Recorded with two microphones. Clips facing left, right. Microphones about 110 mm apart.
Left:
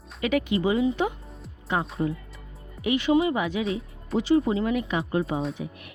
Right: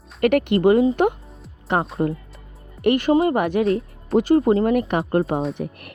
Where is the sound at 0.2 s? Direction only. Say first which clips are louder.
Right 7 dB; 65° right (ahead or behind).